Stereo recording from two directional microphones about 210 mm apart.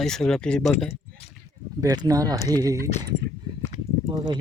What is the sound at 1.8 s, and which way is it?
Speech, 15° right (ahead or behind).